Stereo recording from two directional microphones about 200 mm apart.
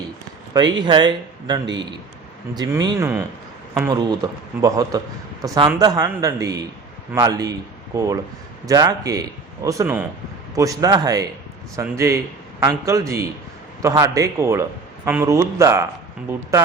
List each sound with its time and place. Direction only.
0.5 s a man's voice: 20° right (ahead or behind)